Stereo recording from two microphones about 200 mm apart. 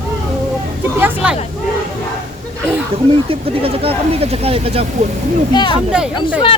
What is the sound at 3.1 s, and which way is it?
Speech, 30° right (ahead or behind).